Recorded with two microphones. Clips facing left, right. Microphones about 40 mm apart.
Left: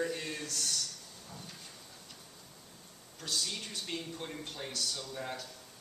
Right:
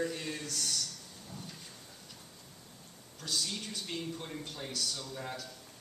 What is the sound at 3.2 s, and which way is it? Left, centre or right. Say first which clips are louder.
A man's voice: even; centre.